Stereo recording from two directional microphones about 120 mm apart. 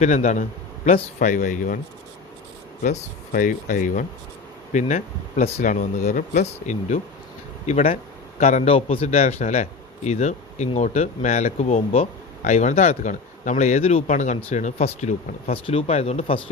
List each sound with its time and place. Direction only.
0.0 s speech: 75° left (ahead or behind)
1.2 s speech: 90° left
3.4 s speech: 90° left
7.7 s speech: 70° left (ahead or behind); by 9.0 s 50° left (ahead or behind)
9.0 s speech: 70° left (ahead or behind)